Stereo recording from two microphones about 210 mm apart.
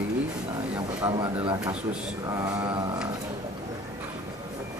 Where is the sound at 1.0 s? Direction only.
20° right (ahead or behind).